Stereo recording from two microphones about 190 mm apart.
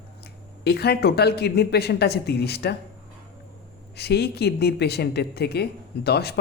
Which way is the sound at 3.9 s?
60° left (ahead or behind).